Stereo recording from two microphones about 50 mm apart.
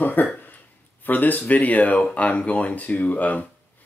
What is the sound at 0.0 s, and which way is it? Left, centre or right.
Speech, left.